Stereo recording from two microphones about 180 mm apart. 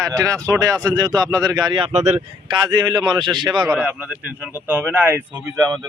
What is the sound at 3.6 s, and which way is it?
Speech, 5° right (ahead or behind).